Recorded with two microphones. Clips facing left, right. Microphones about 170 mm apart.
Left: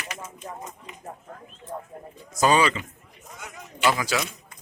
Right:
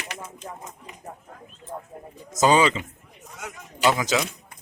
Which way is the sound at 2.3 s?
20° right (ahead or behind).